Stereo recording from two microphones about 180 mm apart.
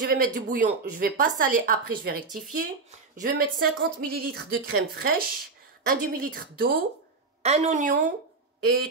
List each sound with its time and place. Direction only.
0.0 s a woman's voice: 55° right (ahead or behind)
7.4 s a woman's voice: 35° right (ahead or behind)